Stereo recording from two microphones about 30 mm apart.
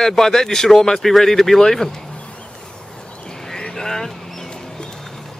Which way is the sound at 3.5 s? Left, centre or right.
Left.